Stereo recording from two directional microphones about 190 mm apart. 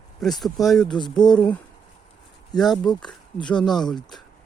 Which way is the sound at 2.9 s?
25° left (ahead or behind).